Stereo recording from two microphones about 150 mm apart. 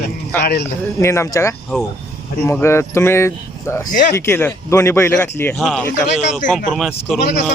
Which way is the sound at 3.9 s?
65° left (ahead or behind).